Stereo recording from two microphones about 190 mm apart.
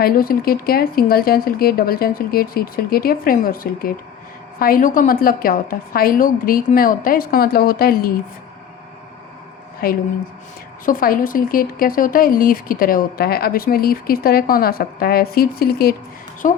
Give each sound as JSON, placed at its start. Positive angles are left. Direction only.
{"t": 0.0, "sound": "speech", "side_deg": 50}
{"t": 10.8, "sound": "speech", "side_deg": 45}